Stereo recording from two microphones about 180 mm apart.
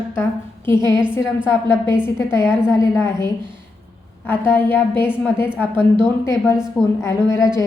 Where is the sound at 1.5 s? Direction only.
15° left (ahead or behind).